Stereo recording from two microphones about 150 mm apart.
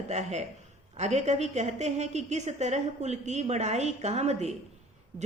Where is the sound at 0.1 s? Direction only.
50° right (ahead or behind).